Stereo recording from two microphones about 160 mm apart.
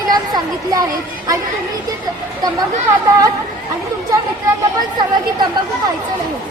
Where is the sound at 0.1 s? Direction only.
25° right (ahead or behind).